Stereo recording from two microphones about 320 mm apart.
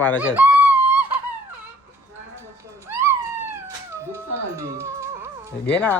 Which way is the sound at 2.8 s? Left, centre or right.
Centre.